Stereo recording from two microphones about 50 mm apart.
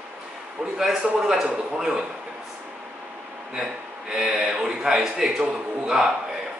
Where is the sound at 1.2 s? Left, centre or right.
Centre.